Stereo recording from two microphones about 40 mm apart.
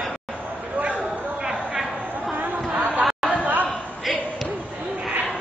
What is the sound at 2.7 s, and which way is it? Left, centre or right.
Chatter, right.